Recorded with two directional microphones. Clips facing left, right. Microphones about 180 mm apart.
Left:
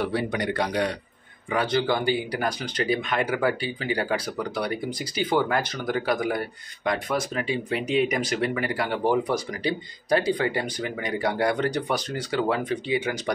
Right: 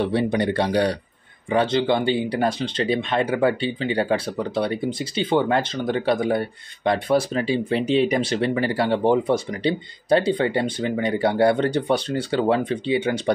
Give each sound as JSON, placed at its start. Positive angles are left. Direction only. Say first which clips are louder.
{"t": 0.0, "sound": "speech", "louder": "right 5 dB", "side_deg": -25}